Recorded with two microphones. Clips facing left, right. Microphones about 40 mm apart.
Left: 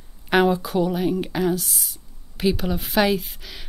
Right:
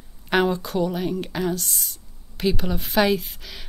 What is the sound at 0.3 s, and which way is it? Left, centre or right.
Speech, centre.